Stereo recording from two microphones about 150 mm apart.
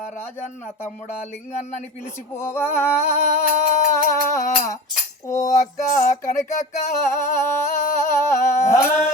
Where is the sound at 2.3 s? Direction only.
15° left (ahead or behind).